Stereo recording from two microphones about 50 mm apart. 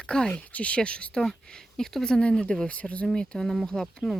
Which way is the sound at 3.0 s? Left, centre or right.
Centre.